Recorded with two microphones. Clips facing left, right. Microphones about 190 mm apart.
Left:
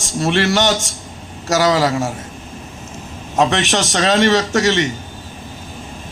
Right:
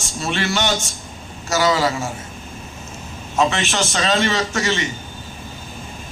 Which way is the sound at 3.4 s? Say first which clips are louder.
Left 3 dB; 70° left (ahead or behind).